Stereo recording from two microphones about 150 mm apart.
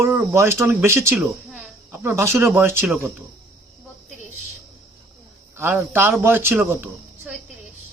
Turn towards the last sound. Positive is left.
turn(degrees=-15)  # may be behind; listen again after turning